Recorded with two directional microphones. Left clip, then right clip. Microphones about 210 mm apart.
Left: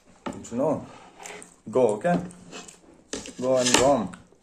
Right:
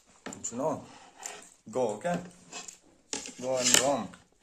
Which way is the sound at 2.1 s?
25° right (ahead or behind).